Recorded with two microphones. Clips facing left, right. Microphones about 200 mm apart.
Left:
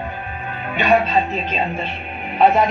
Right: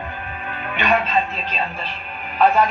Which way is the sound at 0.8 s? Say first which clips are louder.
Left 4 dB; 30° left (ahead or behind).